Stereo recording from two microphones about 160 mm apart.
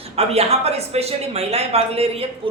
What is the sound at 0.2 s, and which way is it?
Speech, 40° right (ahead or behind).